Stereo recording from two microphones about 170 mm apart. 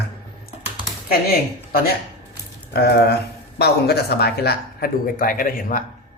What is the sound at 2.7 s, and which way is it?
Speech, 70° left (ahead or behind).